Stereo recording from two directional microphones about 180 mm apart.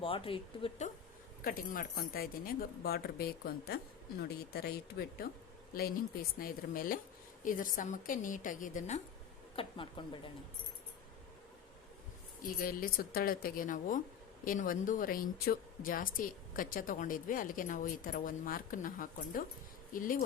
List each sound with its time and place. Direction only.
0.0 s speech: 30° left (ahead or behind)
1.5 s speech: 50° left (ahead or behind)
6.4 s a woman's voice: 55° left (ahead or behind)
9.6 s speech: 30° left (ahead or behind)
12.4 s a woman's voice: 55° left (ahead or behind)